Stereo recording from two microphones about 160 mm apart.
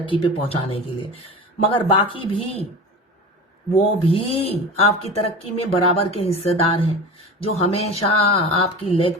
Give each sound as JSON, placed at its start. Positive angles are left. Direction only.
{"t": 0.0, "sound": "speech", "side_deg": 35}
{"t": 3.8, "sound": "speech", "side_deg": 35}